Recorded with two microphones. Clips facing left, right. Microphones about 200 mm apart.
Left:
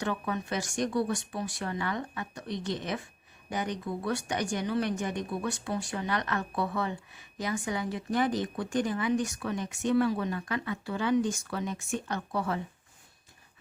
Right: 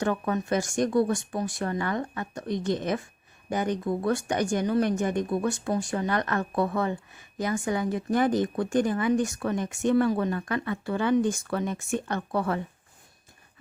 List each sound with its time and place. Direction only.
0.0 s speech: 45° right (ahead or behind)